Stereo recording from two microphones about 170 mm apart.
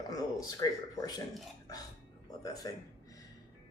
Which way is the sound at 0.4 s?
20° left (ahead or behind).